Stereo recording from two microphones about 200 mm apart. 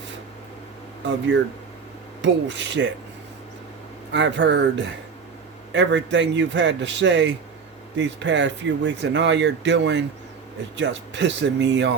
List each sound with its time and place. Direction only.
2.2 s speech: 65° right (ahead or behind)
4.1 s speech: 60° right (ahead or behind)